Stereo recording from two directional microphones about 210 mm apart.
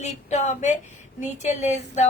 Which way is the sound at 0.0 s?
35° left (ahead or behind).